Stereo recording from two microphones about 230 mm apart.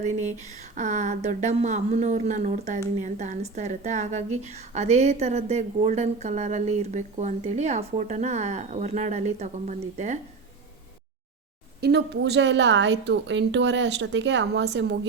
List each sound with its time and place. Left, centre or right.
0.0 s a woman's voice: right
11.8 s a woman's voice: right